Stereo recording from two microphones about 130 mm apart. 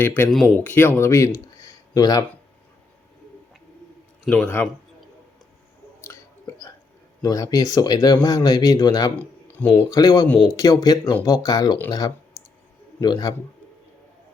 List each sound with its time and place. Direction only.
0.0 s speech: 15° left (ahead or behind)
0.3 s speech: 5° left (ahead or behind); by 2.2 s 30° left (ahead or behind)
4.3 s speech: 15° left (ahead or behind)
6.0 s chewing: 20° left (ahead or behind)
7.2 s speech: 30° left (ahead or behind)
9.1 s speech: 10° left (ahead or behind)
9.9 s a man's voice: 25° left (ahead or behind)